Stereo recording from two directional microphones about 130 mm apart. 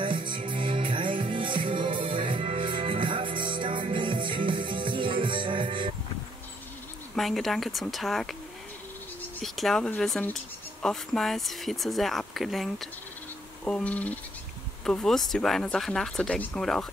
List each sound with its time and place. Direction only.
0.0 s music: 40° right (ahead or behind)
7.2 s speech: centre (ahead or behind)
9.4 s speech: centre (ahead or behind)